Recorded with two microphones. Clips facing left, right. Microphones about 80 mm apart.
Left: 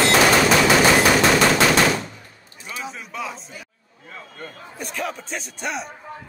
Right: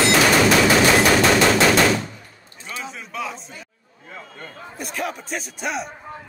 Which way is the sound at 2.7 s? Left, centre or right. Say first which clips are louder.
Even; centre.